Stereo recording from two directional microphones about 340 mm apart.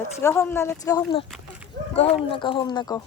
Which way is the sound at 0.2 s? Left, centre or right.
Centre.